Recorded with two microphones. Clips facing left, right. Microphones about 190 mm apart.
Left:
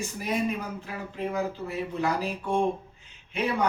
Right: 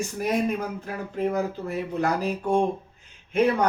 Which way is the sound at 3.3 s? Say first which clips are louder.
Right 6 dB; 45° right (ahead or behind).